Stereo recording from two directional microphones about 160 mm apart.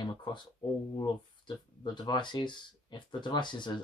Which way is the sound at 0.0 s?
30° left (ahead or behind).